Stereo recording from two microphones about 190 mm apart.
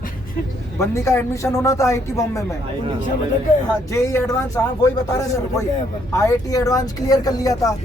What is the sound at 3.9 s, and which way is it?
Speech, 15° left (ahead or behind).